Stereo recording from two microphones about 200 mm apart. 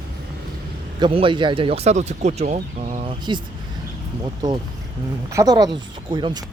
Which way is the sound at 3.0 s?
25° right (ahead or behind).